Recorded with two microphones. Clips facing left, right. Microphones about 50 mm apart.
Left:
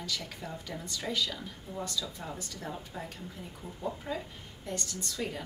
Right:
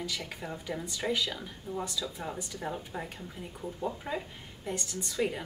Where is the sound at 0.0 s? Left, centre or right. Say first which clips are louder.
Right 1 dB; centre.